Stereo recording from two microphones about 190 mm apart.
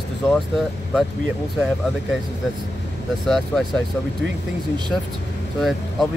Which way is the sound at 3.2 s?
Centre (ahead or behind).